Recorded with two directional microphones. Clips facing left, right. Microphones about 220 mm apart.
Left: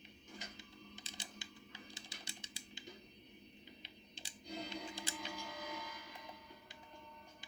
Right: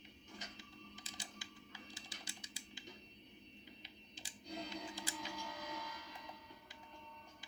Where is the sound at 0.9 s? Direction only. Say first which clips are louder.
Left 1 dB; 25° left (ahead or behind).